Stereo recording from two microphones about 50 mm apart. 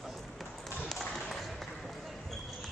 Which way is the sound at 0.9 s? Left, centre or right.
Centre.